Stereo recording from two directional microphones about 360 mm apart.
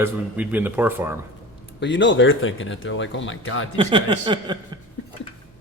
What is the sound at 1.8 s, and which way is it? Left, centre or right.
Speech, left.